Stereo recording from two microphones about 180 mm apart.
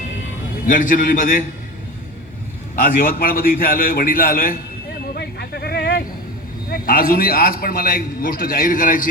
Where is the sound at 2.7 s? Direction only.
50° left (ahead or behind).